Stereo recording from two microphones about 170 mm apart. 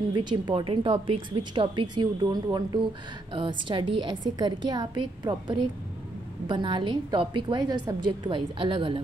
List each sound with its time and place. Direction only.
0.1 s a woman's voice: 25° right (ahead or behind)